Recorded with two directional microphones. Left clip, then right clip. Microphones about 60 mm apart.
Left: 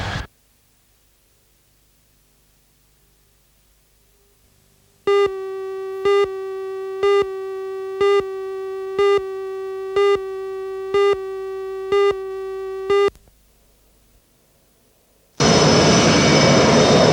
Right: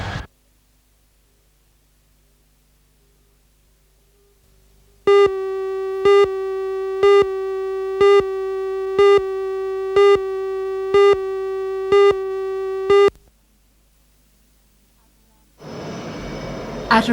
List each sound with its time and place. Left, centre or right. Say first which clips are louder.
0.0 s a sound: left 2 dB; left
5.0 s busy signal: right 4 dB; centre
15.6 s vehicle: left 13 dB; left